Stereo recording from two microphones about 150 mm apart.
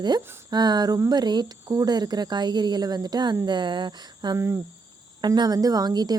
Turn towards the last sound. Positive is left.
turn(degrees=-25)  # may be behind; listen again after turning